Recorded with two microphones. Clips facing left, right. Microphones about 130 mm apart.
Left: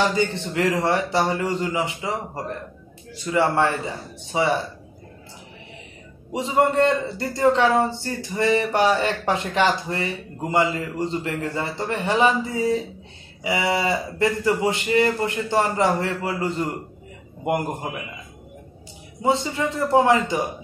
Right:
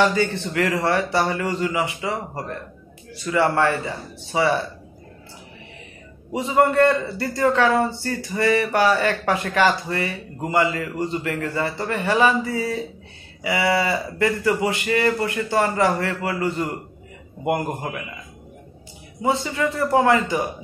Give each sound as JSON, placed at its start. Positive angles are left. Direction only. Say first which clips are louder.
{"t": 0.0, "sound": "a man's voice", "louder": "right 2 dB", "side_deg": 20}
{"t": 3.3, "sound": "a man's voice", "louder": "right 1 dB", "side_deg": 20}
{"t": 6.3, "sound": "a man's voice", "louder": "right 2 dB", "side_deg": 20}
{"t": 19.2, "sound": "a man's voice", "louder": "even", "side_deg": 20}